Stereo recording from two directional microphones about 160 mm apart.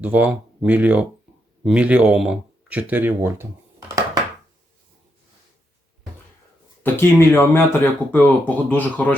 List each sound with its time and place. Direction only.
0.0 s speech: 10° right (ahead or behind)
3.8 s a sound: 20° right (ahead or behind)
6.8 s speech: 15° left (ahead or behind)